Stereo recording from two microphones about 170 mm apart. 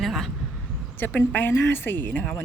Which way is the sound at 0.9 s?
10° left (ahead or behind).